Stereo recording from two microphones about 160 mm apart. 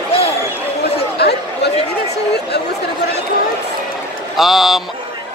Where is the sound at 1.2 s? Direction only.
90° left.